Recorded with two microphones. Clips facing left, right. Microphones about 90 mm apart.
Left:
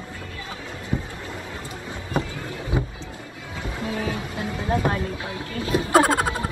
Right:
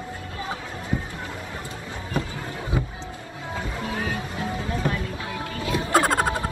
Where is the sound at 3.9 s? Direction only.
40° right (ahead or behind).